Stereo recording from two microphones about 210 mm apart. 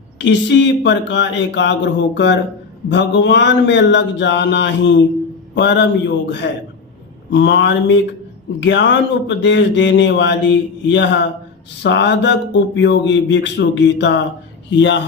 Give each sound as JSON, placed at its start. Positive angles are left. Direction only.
{"t": 0.2, "sound": "speech", "side_deg": 60}